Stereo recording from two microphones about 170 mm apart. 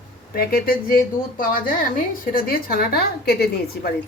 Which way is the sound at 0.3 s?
60° left (ahead or behind).